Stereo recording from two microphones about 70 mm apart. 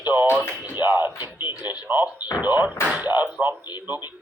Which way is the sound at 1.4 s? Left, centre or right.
Left.